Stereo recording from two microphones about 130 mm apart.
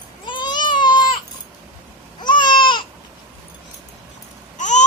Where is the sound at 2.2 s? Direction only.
35° left (ahead or behind).